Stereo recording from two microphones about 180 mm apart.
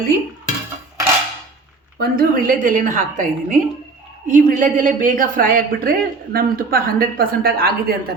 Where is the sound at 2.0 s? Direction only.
50° right (ahead or behind).